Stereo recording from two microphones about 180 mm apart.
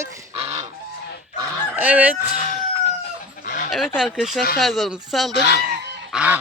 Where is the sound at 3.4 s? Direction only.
50° left (ahead or behind).